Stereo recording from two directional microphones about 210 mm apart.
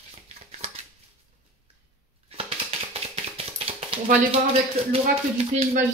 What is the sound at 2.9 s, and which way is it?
Tap, 30° right (ahead or behind).